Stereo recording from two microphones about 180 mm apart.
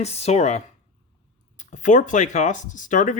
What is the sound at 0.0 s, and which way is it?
Speech, 35° left (ahead or behind).